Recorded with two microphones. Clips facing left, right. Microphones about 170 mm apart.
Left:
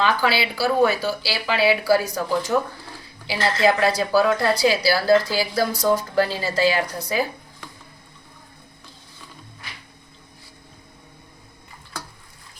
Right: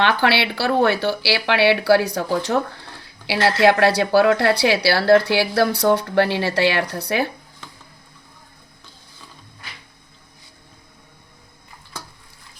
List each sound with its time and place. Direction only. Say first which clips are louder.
0.0 s speech: right 2 dB; 70° right (ahead or behind)